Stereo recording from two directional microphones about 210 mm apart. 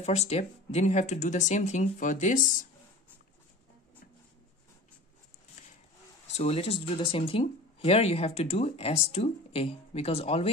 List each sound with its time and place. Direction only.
0.0 s speech: 30° left (ahead or behind)
6.3 s speech: 30° left (ahead or behind)